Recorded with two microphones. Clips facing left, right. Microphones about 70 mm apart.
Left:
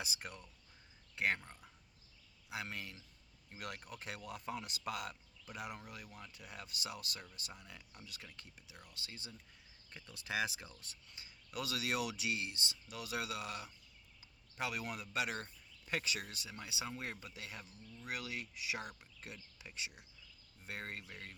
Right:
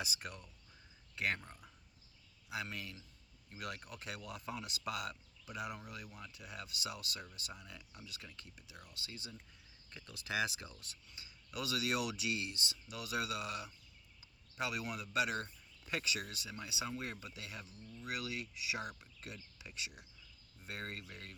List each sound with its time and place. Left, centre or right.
0.0 s speech: left
2.5 s speech: left
6.1 s speech: centre
6.3 s speech: left
8.9 s speech: left
18.8 s speech: centre
19.2 s speech: left